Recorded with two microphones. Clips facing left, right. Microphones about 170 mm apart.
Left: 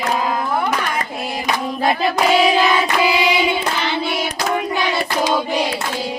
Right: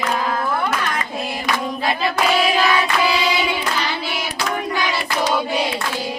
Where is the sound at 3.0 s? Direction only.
20° left (ahead or behind).